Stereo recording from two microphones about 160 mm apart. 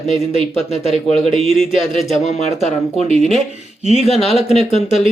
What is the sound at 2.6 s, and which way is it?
Speech, 45° left (ahead or behind).